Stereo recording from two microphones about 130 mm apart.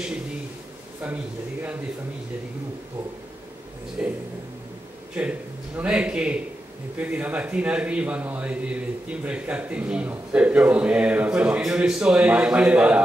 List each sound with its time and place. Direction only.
1.0 s a man's voice: 10° right (ahead or behind)
4.0 s a man's voice: 10° right (ahead or behind)
5.8 s a man's voice: 10° right (ahead or behind)